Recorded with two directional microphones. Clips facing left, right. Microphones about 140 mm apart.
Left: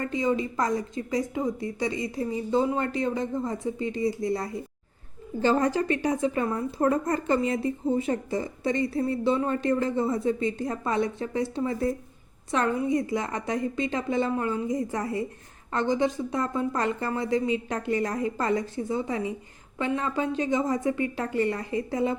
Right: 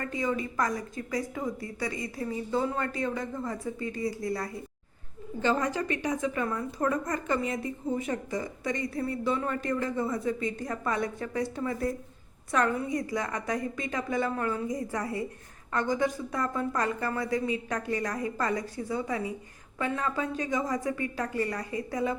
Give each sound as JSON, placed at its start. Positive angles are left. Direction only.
{"t": 0.0, "sound": "a woman's voice", "side_deg": 20}
{"t": 5.4, "sound": "a woman's voice", "side_deg": 35}